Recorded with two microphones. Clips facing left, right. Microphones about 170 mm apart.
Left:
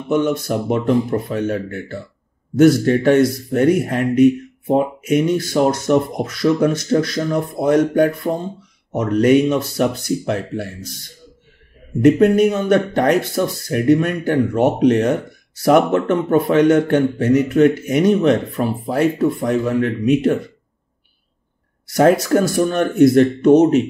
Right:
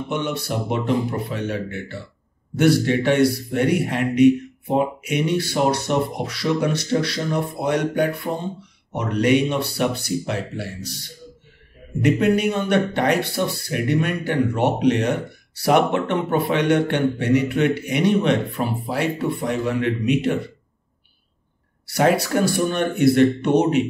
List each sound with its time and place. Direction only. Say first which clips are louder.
0.1 s speech: left 9 dB; 45° left (ahead or behind)
21.8 s speech: left 5 dB; 45° left (ahead or behind)